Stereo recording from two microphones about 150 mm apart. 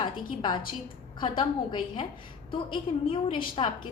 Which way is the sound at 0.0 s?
30° left (ahead or behind).